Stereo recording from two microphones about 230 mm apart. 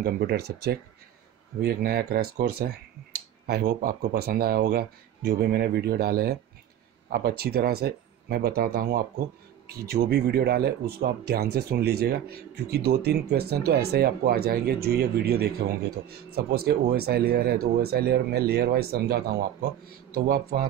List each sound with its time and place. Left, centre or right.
0.0 s speech: right